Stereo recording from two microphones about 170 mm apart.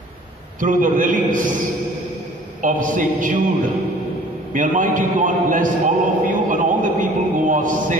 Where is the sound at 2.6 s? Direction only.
50° right (ahead or behind).